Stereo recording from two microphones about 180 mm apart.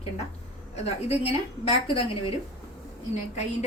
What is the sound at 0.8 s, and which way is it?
A woman's voice, 35° left (ahead or behind).